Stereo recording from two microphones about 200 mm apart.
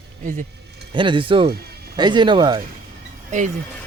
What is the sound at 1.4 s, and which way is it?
Music, 50° right (ahead or behind).